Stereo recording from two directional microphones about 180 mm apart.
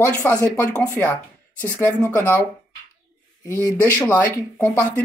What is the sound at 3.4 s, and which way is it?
Speech, 15° left (ahead or behind).